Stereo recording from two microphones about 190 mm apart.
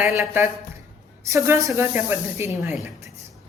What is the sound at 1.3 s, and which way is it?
A woman's voice, 15° right (ahead or behind).